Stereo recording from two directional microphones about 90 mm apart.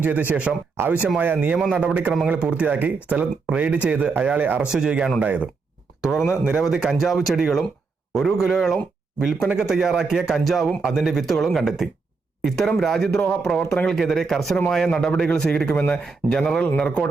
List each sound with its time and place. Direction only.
0.0 s speech: 20° right (ahead or behind)
6.6 s a man's voice: 5° right (ahead or behind)